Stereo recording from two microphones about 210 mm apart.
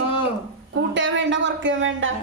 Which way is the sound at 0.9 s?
60° right (ahead or behind).